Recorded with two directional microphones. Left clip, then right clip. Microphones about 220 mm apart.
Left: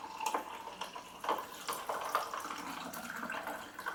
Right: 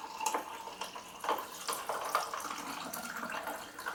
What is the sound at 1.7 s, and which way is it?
Water tap, 15° left (ahead or behind).